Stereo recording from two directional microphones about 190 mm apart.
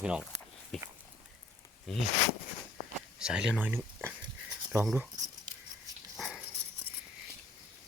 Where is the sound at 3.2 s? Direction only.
5° right (ahead or behind).